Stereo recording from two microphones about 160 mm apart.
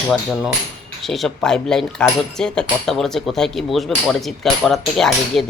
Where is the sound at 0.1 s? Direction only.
Centre (ahead or behind).